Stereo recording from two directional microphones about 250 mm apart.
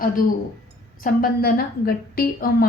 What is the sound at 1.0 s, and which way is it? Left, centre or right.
A woman's voice, left.